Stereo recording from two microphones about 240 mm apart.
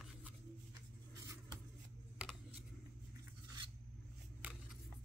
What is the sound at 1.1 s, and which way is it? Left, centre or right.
Vehicle, centre.